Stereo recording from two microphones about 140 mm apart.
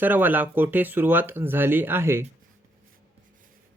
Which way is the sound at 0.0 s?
15° right (ahead or behind).